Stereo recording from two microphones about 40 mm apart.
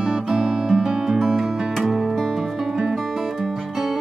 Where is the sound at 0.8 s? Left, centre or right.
Centre.